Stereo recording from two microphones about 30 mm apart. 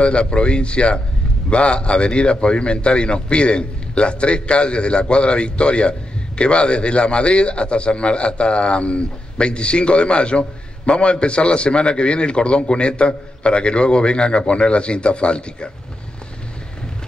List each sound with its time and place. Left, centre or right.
0.0 s a man's voice: left